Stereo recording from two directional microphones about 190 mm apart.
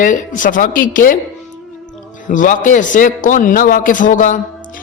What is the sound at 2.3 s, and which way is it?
A man's voice, 40° left (ahead or behind).